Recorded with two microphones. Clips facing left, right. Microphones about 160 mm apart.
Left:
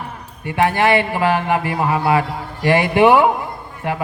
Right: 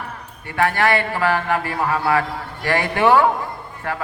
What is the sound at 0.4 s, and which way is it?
A man's voice, 15° left (ahead or behind).